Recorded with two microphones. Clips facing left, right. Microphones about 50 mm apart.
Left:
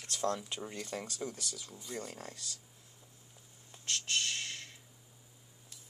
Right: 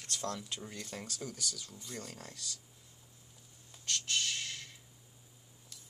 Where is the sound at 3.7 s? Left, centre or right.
Left.